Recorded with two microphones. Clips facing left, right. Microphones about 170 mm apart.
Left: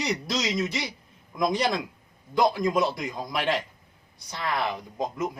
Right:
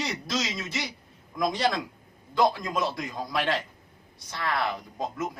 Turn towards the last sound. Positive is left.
turn(degrees=15)  # may be behind; listen again after turning